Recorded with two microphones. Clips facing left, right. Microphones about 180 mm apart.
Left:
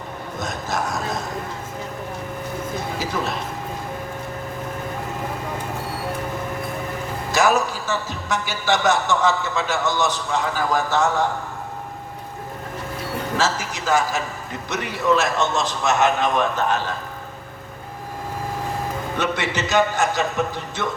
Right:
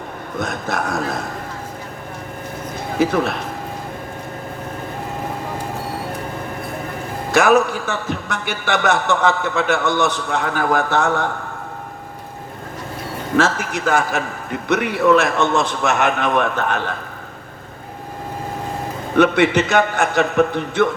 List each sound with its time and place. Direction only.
0.3 s speech: 60° right (ahead or behind)
3.0 s a man's voice: 60° right (ahead or behind)
7.3 s a man's voice: 60° right (ahead or behind)
13.3 s a man's voice: 60° right (ahead or behind)
19.1 s a man's voice: 60° right (ahead or behind)